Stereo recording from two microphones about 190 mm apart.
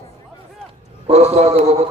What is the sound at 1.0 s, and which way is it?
Speech, 35° right (ahead or behind).